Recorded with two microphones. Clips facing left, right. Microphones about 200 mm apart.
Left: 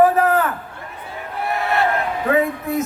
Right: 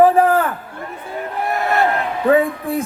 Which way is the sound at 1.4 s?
45° right (ahead or behind).